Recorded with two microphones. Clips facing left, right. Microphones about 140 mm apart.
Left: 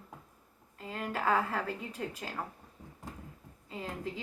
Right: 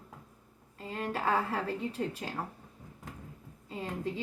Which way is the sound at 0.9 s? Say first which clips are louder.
Even; 30° right (ahead or behind).